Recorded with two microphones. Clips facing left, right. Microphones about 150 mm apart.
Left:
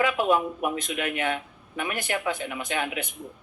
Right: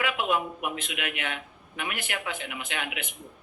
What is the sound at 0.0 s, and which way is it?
Speech, 40° left (ahead or behind).